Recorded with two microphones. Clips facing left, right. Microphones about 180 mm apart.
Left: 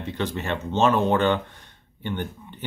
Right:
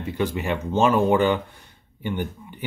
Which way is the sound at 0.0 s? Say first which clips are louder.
Right 3 dB; 10° right (ahead or behind).